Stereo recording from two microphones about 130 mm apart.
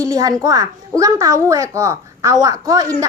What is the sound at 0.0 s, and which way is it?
A child's voice, 25° right (ahead or behind).